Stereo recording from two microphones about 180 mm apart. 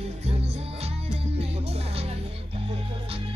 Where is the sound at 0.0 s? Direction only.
35° right (ahead or behind).